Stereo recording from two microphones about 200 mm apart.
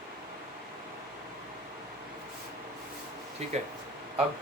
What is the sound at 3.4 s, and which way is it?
Speech, 30° right (ahead or behind).